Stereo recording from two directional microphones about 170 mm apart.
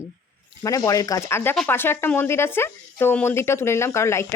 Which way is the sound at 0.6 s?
20° left (ahead or behind).